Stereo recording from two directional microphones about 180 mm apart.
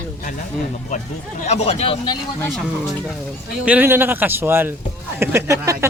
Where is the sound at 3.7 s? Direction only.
10° right (ahead or behind).